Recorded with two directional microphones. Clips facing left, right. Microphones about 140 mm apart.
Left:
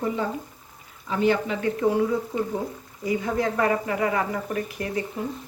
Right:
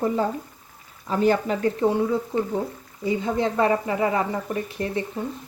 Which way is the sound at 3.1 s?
25° right (ahead or behind).